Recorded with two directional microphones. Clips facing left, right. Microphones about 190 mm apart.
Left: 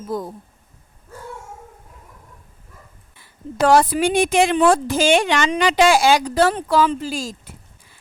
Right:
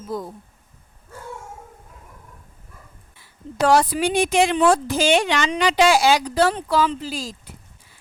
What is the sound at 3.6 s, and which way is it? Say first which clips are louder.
Speech: left 2 dB; 50° left (ahead or behind).